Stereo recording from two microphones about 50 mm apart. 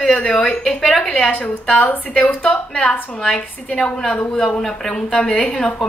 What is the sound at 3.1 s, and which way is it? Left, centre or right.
A woman's voice, centre.